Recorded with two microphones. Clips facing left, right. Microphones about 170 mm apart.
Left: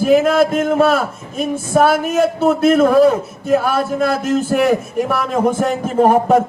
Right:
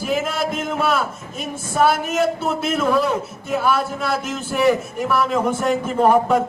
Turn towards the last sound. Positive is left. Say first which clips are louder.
# left 4 dB
turn(degrees=45)  # may be behind; listen again after turning